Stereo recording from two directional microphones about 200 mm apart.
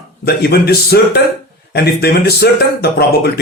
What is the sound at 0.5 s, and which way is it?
Speech, 55° left (ahead or behind).